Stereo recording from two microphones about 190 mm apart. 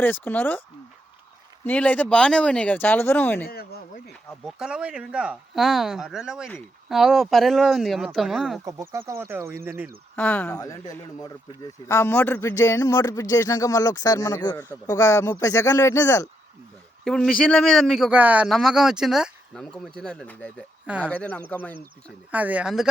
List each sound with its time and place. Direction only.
0.0 s speech: 10° left (ahead or behind)
1.6 s speech: 10° left (ahead or behind)
3.4 s speech: 55° left (ahead or behind)
4.4 s a man's voice: 5° right (ahead or behind)
8.6 s speech: 15° right (ahead or behind)
10.2 s speech: 10° left (ahead or behind)
10.6 s a man's voice: 20° left (ahead or behind)
17.0 s a man's voice: 5° left (ahead or behind)
22.3 s speech: 10° right (ahead or behind)